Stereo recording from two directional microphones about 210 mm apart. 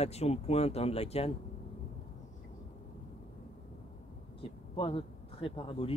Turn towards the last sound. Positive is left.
turn(degrees=25)  # may be behind; listen again after turning